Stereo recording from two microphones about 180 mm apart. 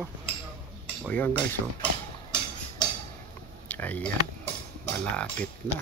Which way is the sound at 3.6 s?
10° left (ahead or behind).